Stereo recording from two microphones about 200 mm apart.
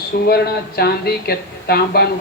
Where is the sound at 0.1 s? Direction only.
50° left (ahead or behind).